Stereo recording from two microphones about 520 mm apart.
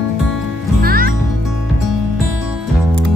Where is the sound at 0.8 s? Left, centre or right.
Centre.